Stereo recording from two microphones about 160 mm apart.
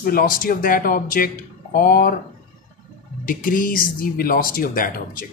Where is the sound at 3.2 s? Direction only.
60° left (ahead or behind).